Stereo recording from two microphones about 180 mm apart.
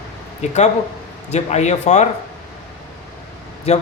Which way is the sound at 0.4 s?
40° left (ahead or behind).